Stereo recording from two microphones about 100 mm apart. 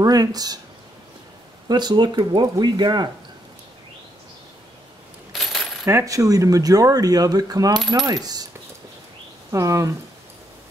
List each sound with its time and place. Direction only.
0.0 s speech: 40° right (ahead or behind)
1.7 s speech: 45° right (ahead or behind)
5.3 s coin: centre (ahead or behind)
5.9 s speech: 30° right (ahead or behind)
9.5 s speech: 30° right (ahead or behind)